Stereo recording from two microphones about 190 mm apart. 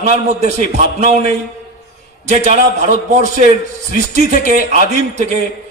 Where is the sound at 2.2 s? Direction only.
40° right (ahead or behind).